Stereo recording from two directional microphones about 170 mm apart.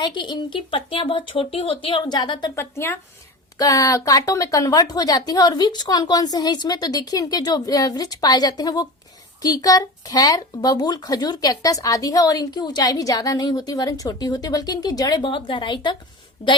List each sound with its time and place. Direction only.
0.0 s a woman's voice: 25° left (ahead or behind)